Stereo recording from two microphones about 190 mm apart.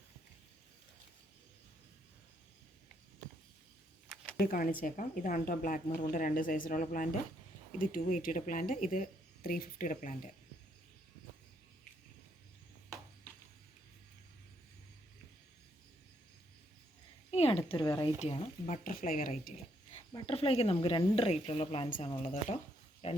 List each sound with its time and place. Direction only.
4.4 s speech: 55° left (ahead or behind)
17.3 s a sound: 30° left (ahead or behind)
17.7 s speech: 20° left (ahead or behind)
18.2 s speech: 35° left (ahead or behind)
18.8 s speech: 50° left (ahead or behind)
20.1 s speech: 30° left (ahead or behind)
21.8 s speech: 45° left (ahead or behind)
22.1 s speech: 30° left (ahead or behind)